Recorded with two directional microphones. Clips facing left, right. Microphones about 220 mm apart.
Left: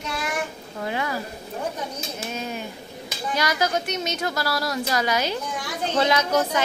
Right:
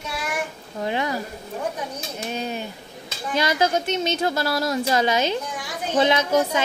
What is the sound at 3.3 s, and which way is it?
A woman's voice, 25° right (ahead or behind).